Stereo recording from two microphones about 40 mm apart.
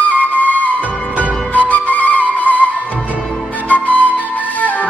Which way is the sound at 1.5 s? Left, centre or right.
Left.